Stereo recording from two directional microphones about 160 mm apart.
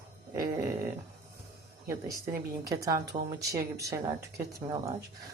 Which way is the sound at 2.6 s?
20° right (ahead or behind).